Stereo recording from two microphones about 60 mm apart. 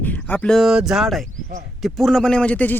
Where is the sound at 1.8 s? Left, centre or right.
Centre; by 2.7 s left.